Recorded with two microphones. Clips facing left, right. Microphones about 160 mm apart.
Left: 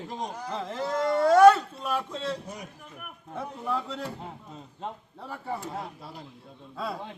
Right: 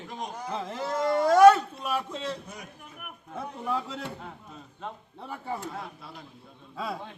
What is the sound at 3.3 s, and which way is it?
Speech, centre (ahead or behind).